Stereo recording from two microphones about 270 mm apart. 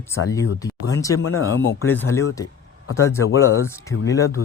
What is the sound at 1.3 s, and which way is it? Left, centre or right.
Speech, left.